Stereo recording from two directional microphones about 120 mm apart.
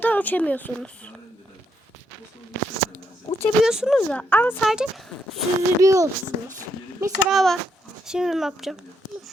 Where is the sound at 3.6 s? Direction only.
5° right (ahead or behind).